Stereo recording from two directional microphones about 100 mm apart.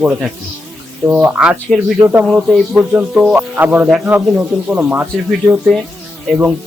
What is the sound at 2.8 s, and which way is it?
Speech, 10° right (ahead or behind).